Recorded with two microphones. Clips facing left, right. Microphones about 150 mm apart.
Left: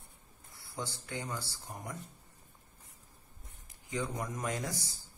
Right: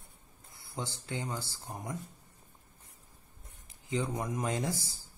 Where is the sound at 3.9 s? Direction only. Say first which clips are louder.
Right 3 dB; 25° right (ahead or behind).